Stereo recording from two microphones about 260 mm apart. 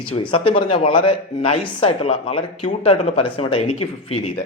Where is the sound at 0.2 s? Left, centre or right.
Centre.